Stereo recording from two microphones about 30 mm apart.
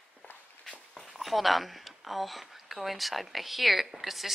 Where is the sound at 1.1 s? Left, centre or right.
Centre.